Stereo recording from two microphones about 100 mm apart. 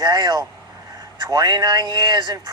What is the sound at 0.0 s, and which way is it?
Speech, 45° right (ahead or behind).